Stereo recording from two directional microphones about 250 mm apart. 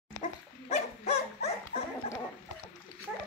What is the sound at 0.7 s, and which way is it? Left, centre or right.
Dog, left.